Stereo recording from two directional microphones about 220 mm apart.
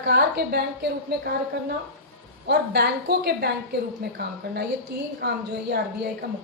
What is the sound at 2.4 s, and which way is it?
A woman's voice, 45° right (ahead or behind).